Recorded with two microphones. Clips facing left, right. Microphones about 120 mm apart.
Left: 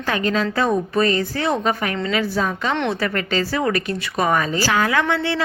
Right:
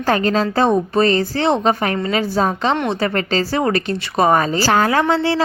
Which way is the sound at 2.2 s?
30° right (ahead or behind).